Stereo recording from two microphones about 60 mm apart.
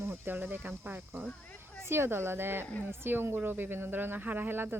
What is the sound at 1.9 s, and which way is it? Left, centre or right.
Speech, right.